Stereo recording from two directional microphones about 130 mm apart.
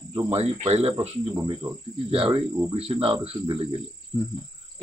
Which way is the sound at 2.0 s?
50° right (ahead or behind).